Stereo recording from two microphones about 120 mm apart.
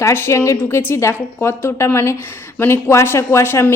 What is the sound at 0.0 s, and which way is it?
A woman's voice, 20° left (ahead or behind).